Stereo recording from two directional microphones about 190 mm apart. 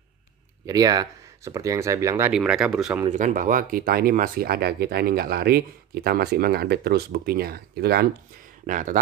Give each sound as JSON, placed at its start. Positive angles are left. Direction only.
{"t": 0.7, "sound": "speech", "side_deg": -20}
{"t": 2.3, "sound": "speech", "side_deg": -5}
{"t": 3.1, "sound": "speech", "side_deg": -40}
{"t": 8.6, "sound": "speech", "side_deg": -45}